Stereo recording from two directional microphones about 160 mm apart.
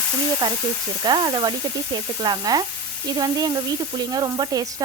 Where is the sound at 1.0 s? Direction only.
25° right (ahead or behind).